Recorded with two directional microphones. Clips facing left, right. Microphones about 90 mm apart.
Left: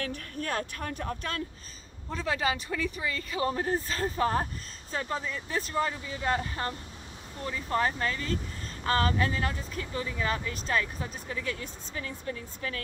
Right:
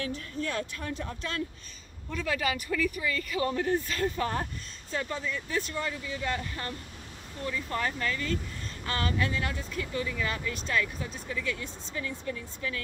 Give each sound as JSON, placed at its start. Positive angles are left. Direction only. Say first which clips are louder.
{"t": 0.0, "sound": "speech", "louder": "right 1 dB", "side_deg": 50}
{"t": 2.1, "sound": "speech", "louder": "left 1 dB", "side_deg": 25}